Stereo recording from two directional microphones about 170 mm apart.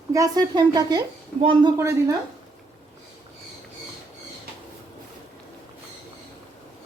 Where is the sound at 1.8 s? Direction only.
15° right (ahead or behind).